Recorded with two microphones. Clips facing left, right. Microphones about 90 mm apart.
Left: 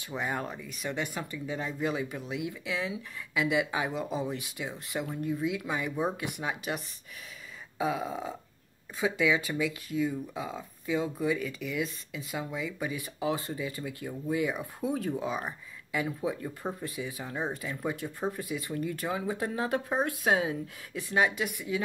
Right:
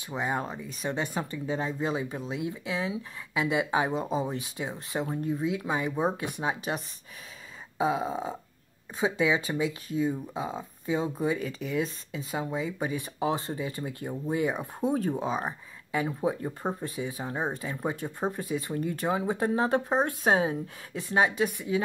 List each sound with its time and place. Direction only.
0.0 s speech: 25° right (ahead or behind)